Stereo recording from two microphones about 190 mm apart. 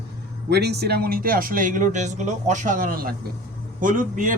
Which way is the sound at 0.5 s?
60° right (ahead or behind).